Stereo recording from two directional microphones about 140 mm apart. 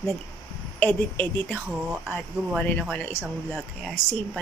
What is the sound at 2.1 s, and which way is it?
A woman's voice, 10° left (ahead or behind).